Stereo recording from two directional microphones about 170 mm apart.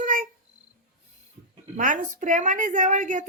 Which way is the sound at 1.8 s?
50° right (ahead or behind).